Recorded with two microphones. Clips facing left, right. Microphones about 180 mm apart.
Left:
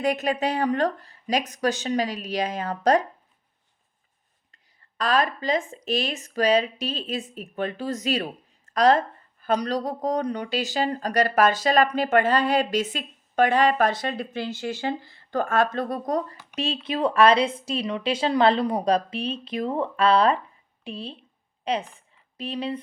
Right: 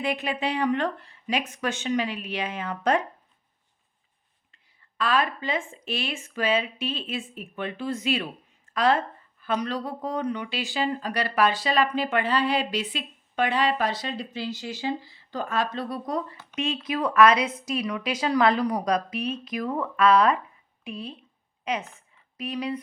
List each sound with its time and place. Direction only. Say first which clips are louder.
0.0 s speech: left 4 dB; 45° left (ahead or behind)
4.9 s speech: left 2 dB; 40° left (ahead or behind)
16.8 s a woman's voice: left 1 dB; 30° left (ahead or behind)